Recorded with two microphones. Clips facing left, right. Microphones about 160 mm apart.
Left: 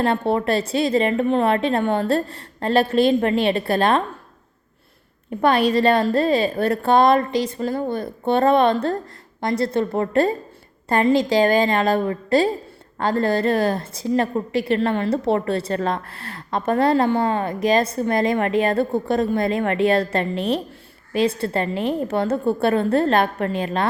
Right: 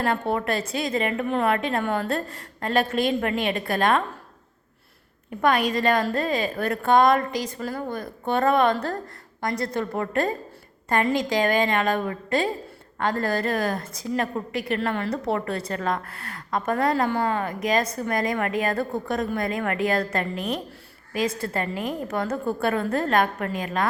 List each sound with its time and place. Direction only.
0.0 s a woman's voice: 30° left (ahead or behind)
5.4 s a woman's voice: 30° left (ahead or behind)